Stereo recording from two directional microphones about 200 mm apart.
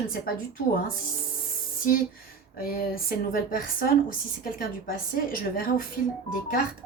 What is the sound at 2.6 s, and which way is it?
A woman's voice, 45° left (ahead or behind).